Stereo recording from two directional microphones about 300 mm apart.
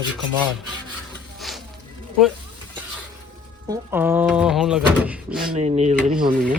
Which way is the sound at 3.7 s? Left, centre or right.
Centre.